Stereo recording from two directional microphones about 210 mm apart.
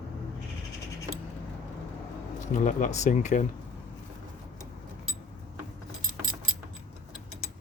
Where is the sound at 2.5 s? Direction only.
35° left (ahead or behind).